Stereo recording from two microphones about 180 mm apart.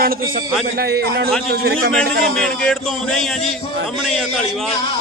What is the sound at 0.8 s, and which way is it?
A man's voice, 60° right (ahead or behind).